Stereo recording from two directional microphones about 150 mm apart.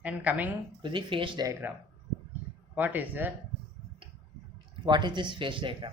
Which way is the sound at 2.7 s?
10° right (ahead or behind).